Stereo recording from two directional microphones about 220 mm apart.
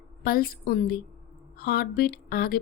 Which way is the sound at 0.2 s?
40° left (ahead or behind).